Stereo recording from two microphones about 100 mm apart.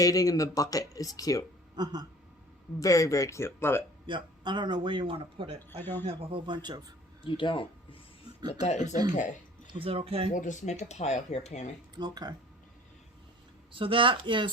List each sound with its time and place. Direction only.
0.0 s speech: 35° left (ahead or behind)
1.7 s a sound: 45° right (ahead or behind)
2.8 s speech: 35° left (ahead or behind)
4.0 s a man's voice: 50° right (ahead or behind)
5.5 s speech: 20° left (ahead or behind)
6.3 s speech: 50° right (ahead or behind)
7.3 s speech: 55° left (ahead or behind)
8.8 s speech: 40° right (ahead or behind)
9.6 s speech: 65° right (ahead or behind)
10.8 s speech: 90° left
11.9 s speech: 45° right (ahead or behind)
13.7 s a man's voice: 60° right (ahead or behind)